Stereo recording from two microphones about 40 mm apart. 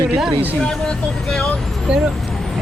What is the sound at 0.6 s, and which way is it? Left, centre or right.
Speech, centre.